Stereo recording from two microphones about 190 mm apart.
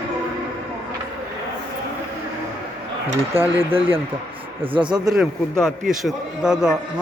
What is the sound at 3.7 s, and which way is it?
Speech, 30° right (ahead or behind).